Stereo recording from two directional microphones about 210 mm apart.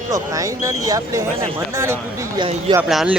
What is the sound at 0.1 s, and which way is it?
Speech, 15° right (ahead or behind).